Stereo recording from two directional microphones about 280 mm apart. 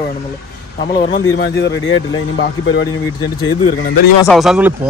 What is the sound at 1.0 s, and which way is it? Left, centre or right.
Speech, left.